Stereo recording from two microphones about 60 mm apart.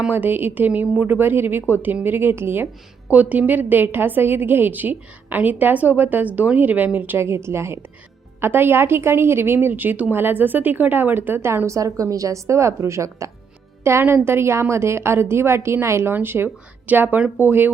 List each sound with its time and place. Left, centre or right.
0.1 s a woman's voice: right
1.2 s a woman's voice: right
3.1 s a woman's voice: right
7.2 s a woman's voice: right
13.9 s a woman's voice: right